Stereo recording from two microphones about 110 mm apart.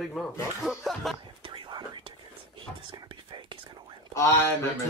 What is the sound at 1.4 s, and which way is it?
Whispering, 45° right (ahead or behind).